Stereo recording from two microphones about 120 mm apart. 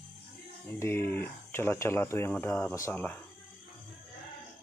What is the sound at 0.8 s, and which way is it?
Speech, 15° left (ahead or behind).